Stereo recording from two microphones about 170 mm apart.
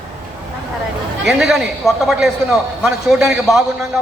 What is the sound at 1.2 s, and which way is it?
A man's voice, centre (ahead or behind).